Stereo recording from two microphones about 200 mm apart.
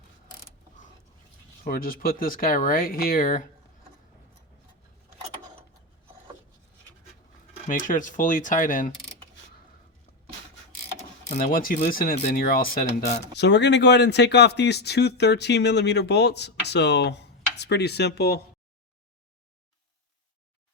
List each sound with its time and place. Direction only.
1.6 s speech: 45° left (ahead or behind)
7.7 s speech: 40° left (ahead or behind)
11.3 s speech: 45° left (ahead or behind)
13.3 s speech: 60° left (ahead or behind)